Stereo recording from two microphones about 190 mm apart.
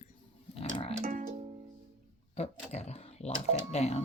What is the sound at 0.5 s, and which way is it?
Music, 30° left (ahead or behind).